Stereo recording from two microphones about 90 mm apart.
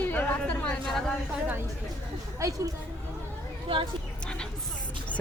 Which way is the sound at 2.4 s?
35° right (ahead or behind).